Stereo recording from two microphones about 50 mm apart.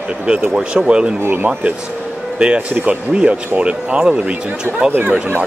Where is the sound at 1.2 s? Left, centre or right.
Right.